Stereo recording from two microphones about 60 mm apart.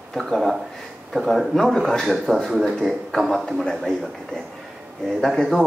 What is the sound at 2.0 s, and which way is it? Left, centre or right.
A man's voice, centre.